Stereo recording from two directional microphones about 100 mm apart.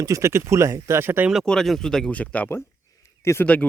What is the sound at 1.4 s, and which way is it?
Speech, 5° left (ahead or behind).